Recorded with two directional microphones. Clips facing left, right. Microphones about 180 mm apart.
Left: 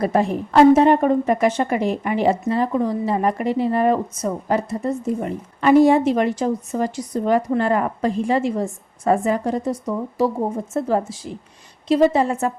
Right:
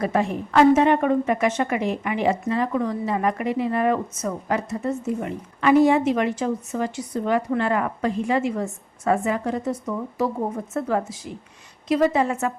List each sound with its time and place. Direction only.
0.0 s a woman's voice: 35° left (ahead or behind)